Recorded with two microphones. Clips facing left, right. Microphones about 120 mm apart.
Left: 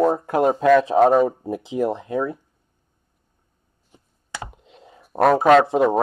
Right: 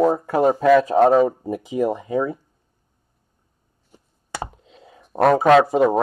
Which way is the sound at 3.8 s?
40° right (ahead or behind).